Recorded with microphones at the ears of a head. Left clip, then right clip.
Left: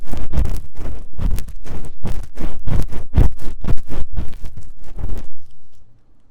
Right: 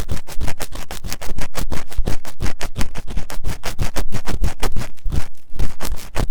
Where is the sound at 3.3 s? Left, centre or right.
Right.